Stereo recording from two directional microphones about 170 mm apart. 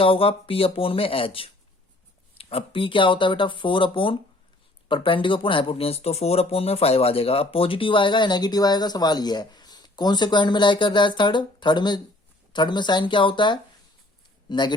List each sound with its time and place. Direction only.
0.0 s speech: 30° left (ahead or behind)